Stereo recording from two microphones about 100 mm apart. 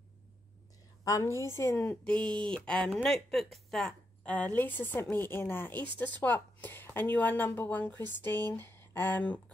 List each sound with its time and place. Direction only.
1.0 s a woman's voice: 30° left (ahead or behind)
1.8 s a woman's voice: 10° left (ahead or behind)